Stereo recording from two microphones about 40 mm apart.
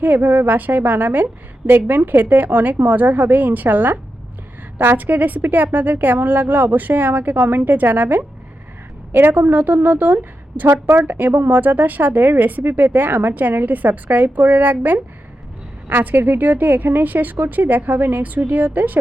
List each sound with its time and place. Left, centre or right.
0.0 s a woman's voice: right
4.9 s a woman's voice: right
9.3 s a woman's voice: right